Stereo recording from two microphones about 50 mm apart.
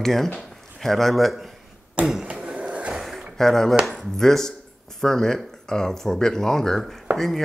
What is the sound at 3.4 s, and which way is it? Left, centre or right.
Speech, centre.